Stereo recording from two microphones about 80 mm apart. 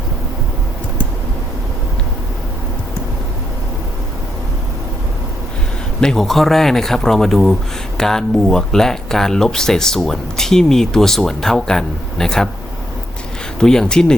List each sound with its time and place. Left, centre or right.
6.0 s speech: centre
13.6 s speech: centre